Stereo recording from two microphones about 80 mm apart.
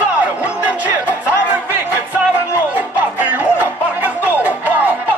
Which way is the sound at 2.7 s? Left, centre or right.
Centre.